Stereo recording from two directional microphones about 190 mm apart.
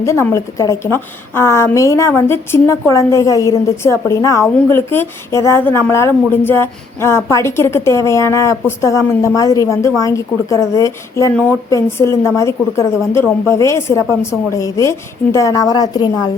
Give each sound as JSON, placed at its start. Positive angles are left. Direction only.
{"t": 0.0, "sound": "a woman's voice", "side_deg": 15}